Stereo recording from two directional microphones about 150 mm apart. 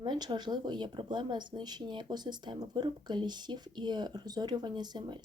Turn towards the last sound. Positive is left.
turn(degrees=-30)  # may be behind; listen again after turning